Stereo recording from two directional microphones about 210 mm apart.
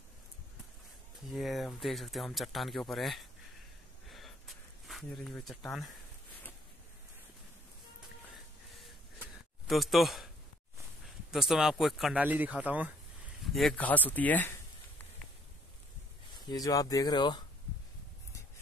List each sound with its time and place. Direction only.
1.3 s speech: centre (ahead or behind)
4.1 s a sound: centre (ahead or behind)
9.7 s speech: centre (ahead or behind)
11.3 s speech: centre (ahead or behind)
16.3 s speech: 20° left (ahead or behind)